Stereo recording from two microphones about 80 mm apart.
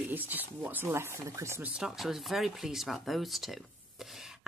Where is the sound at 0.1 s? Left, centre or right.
Right.